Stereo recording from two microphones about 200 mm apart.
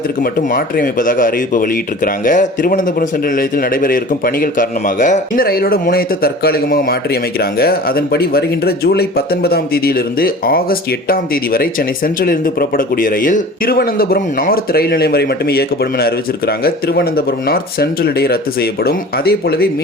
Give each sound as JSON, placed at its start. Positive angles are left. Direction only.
{"t": 0.2, "sound": "speech", "side_deg": 45}